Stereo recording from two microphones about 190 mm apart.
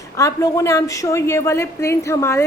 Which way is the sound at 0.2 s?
15° left (ahead or behind).